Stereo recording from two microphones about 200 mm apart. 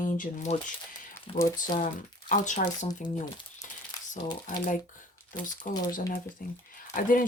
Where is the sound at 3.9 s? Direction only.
20° left (ahead or behind).